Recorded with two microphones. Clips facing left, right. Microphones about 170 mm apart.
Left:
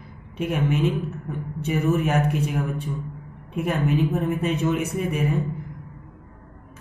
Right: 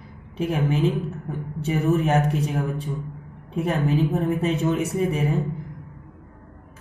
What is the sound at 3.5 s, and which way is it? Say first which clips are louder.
A woman's voice: even; 30° right (ahead or behind).